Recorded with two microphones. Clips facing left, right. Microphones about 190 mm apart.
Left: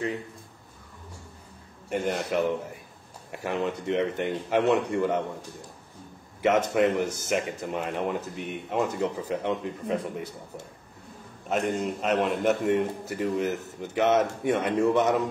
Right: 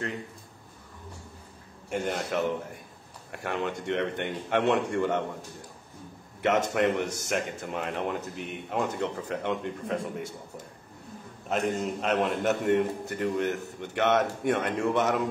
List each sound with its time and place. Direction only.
1.9 s a man's voice: centre (ahead or behind)
6.7 s a man's voice: centre (ahead or behind)
11.4 s a man's voice: centre (ahead or behind)